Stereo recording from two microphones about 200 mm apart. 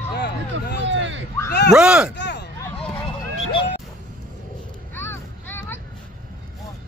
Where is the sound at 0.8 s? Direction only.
65° right (ahead or behind).